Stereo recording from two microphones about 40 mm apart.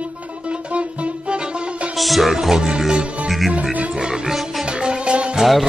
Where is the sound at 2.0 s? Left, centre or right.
Centre.